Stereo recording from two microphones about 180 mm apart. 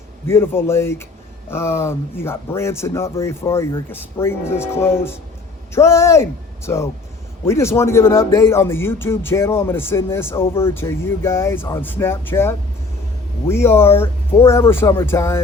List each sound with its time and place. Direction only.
0.3 s speech: 15° left (ahead or behind)